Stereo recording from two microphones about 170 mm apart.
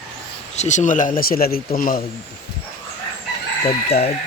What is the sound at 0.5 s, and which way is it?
Speech, 45° left (ahead or behind).